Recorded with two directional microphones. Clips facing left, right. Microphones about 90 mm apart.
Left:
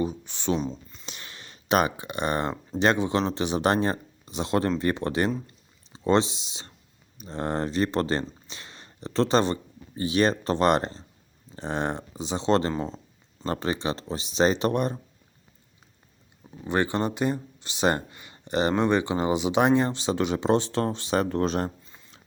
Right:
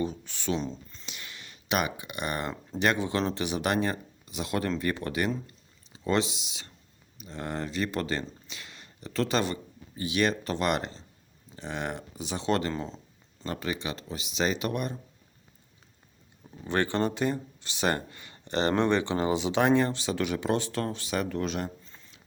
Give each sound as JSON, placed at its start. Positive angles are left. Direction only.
{"t": 0.0, "sound": "speech", "side_deg": 20}
{"t": 0.6, "sound": "a sound", "side_deg": 10}
{"t": 1.0, "sound": "speech", "side_deg": 35}
{"t": 16.6, "sound": "speech", "side_deg": 15}